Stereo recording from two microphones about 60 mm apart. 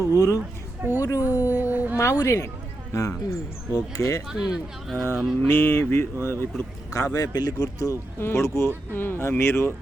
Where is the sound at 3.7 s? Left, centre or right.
Left.